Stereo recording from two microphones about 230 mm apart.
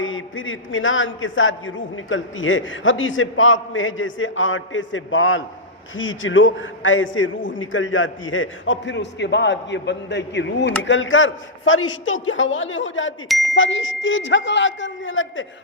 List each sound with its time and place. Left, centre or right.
0.0 s a man's voice: left
13.2 s speech: centre
13.5 s a man's voice: left